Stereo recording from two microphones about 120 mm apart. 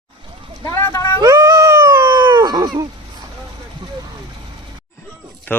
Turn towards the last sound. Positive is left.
turn(degrees=15)  # may be behind; listen again after turning